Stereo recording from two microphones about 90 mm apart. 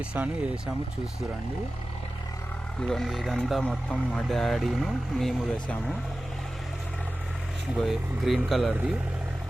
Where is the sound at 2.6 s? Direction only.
5° left (ahead or behind).